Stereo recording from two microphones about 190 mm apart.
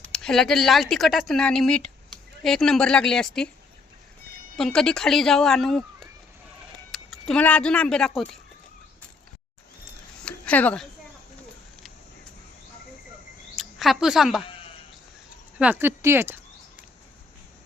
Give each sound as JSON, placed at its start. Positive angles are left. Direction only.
{"t": 0.1, "sound": "speech", "side_deg": 0}
{"t": 4.5, "sound": "speech", "side_deg": 0}
{"t": 10.2, "sound": "speech", "side_deg": 5}
{"t": 13.6, "sound": "speech", "side_deg": 0}
{"t": 15.5, "sound": "a sound", "side_deg": -10}